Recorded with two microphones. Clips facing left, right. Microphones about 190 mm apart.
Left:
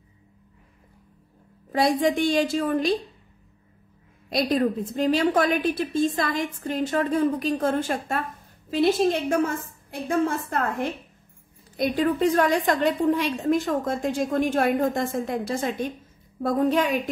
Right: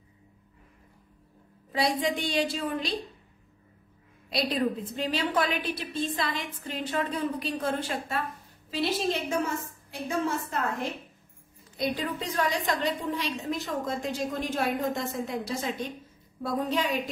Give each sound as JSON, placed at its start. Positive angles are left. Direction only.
{"t": 1.7, "sound": "a woman's voice", "side_deg": 50}
{"t": 4.3, "sound": "a woman's voice", "side_deg": 45}